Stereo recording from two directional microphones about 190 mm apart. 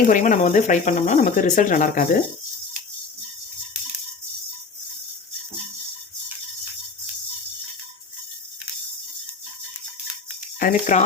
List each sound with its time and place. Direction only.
0.1 s speech: 45° left (ahead or behind)
10.6 s speech: 45° left (ahead or behind)